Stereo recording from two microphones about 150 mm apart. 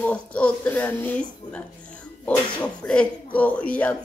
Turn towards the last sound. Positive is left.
turn(degrees=10)  # may be behind; listen again after turning